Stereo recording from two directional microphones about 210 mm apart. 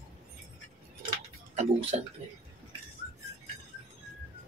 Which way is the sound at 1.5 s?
30° right (ahead or behind).